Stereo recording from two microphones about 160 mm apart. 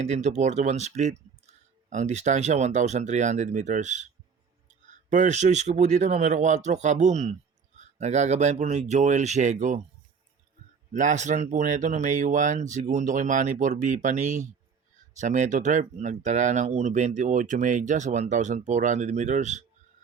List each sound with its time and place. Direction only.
0.0 s speech: 45° right (ahead or behind)
10.9 s speech: 50° right (ahead or behind)